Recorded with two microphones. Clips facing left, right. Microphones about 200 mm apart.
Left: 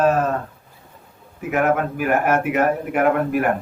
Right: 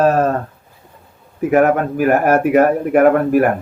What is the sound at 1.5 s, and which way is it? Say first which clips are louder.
Speech: right 6 dB; 45° right (ahead or behind).